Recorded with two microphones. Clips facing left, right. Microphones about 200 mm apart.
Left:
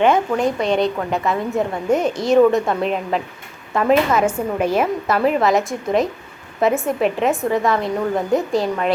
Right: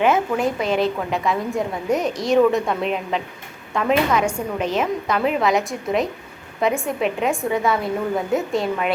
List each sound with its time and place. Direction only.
0.0 s a woman's voice: 5° right (ahead or behind)